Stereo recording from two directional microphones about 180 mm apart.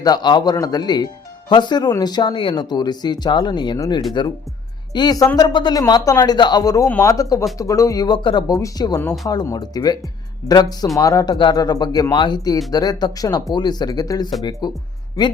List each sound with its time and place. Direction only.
0.0 s speech: 25° left (ahead or behind)